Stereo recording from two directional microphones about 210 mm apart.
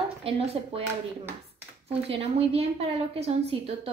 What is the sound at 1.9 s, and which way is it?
A woman's voice, 30° right (ahead or behind).